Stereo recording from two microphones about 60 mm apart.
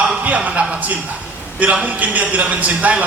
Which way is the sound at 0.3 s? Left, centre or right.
Right.